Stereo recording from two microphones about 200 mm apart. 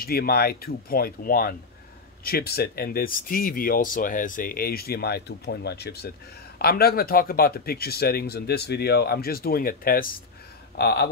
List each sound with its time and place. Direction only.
0.0 s speech: 50° left (ahead or behind)